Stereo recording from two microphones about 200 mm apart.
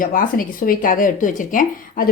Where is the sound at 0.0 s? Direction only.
45° left (ahead or behind).